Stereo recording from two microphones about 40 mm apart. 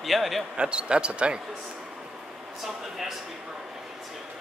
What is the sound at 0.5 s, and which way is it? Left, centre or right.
Speech, right.